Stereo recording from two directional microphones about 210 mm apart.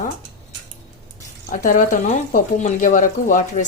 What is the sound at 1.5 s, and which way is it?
A woman's voice, 40° left (ahead or behind).